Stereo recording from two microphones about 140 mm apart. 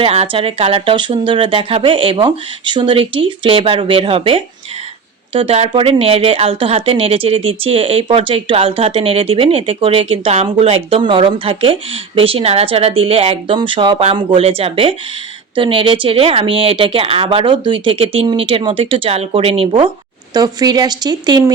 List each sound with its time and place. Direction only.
0.0 s a woman's voice: 45° right (ahead or behind)
20.3 s speech: 30° right (ahead or behind)